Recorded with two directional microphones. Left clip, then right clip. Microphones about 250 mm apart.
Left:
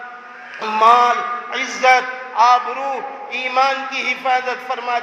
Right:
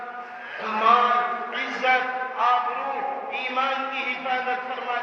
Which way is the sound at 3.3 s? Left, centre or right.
Left.